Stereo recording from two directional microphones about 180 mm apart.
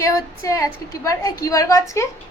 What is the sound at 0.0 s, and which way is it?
A woman's voice, 15° left (ahead or behind).